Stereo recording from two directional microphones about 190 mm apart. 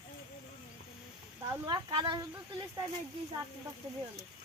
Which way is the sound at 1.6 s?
25° right (ahead or behind).